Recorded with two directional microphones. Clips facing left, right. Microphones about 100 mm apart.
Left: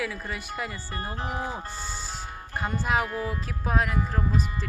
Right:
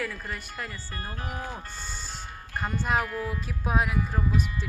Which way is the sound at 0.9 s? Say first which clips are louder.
Left 5 dB; 30° left (ahead or behind).